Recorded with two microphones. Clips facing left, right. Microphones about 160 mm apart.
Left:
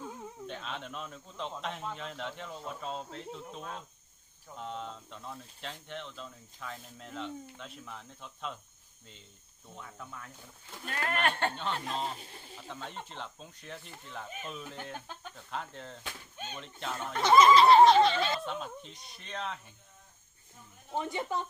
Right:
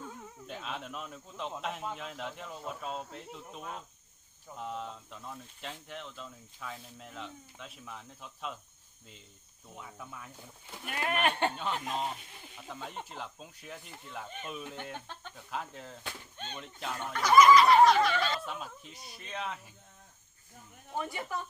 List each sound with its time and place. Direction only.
0.4 s speech: 5° right (ahead or behind)
9.6 s speech: 10° right (ahead or behind)
17.1 s snicker: 25° left (ahead or behind)
18.3 s speech: 5° right (ahead or behind)
20.9 s snicker: 20° left (ahead or behind)